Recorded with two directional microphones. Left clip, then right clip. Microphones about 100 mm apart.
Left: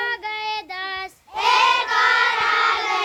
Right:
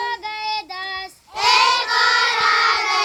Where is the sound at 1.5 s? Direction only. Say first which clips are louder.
Right 1 dB; 45° right (ahead or behind).